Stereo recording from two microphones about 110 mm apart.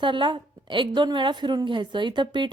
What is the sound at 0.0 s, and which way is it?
A woman's voice, 45° right (ahead or behind).